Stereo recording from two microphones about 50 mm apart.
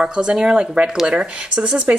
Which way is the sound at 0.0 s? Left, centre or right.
Centre.